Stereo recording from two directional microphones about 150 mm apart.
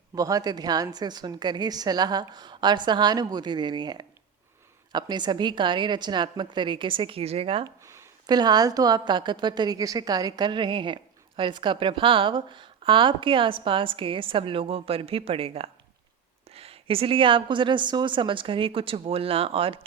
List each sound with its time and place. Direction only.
0.2 s a woman's voice: 25° right (ahead or behind)
7.9 s a woman's voice: 25° right (ahead or behind); by 19.8 s 40° right (ahead or behind)